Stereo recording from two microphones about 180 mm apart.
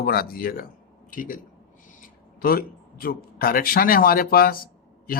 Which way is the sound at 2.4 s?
55° left (ahead or behind).